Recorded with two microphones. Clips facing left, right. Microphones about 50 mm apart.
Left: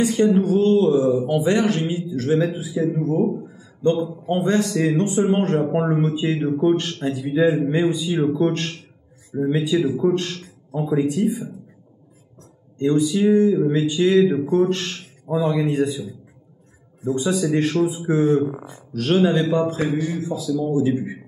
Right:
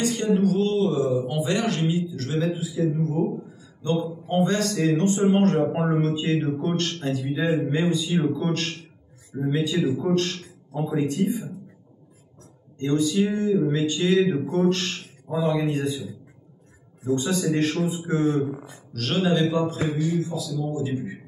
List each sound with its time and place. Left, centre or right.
0.0 s speech: centre
0.4 s speech: left
0.7 s mantra: left
1.6 s a man's voice: left
4.3 s speech: centre
12.7 s a man's voice: centre
14.7 s a sound: centre
15.3 s a man's voice: centre
17.0 s a man's voice: centre
19.5 s mantra: left
20.2 s a man's voice: left